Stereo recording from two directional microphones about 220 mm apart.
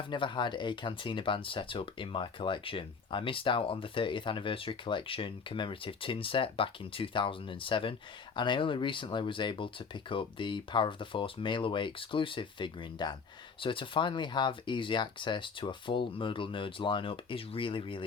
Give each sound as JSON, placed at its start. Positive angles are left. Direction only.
{"t": 0.0, "sound": "speech", "side_deg": 20}